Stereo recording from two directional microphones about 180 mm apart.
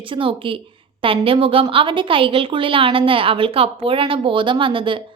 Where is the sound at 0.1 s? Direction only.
30° right (ahead or behind).